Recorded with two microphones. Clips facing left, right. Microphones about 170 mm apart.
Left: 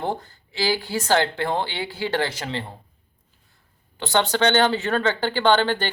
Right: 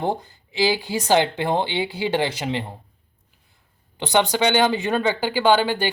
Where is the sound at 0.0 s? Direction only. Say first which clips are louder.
Right 3 dB; 15° right (ahead or behind).